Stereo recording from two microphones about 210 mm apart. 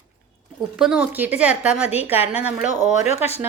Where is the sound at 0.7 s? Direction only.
5° right (ahead or behind).